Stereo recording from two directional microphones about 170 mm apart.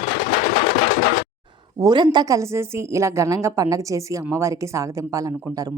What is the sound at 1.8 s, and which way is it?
A woman's voice, 25° right (ahead or behind).